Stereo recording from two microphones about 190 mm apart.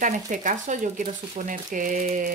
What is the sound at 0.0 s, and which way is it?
Speech, 40° right (ahead or behind).